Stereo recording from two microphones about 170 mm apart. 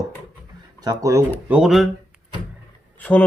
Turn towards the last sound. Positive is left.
turn(degrees=10)  # may be behind; listen again after turning